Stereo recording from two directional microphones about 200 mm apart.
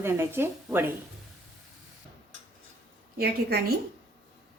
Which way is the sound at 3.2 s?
50° right (ahead or behind).